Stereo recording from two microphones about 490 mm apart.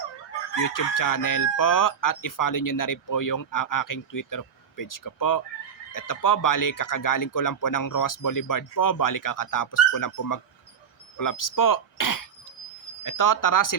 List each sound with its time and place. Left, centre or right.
0.6 s chicken: left
11.2 s speech: left
13.0 s chicken: left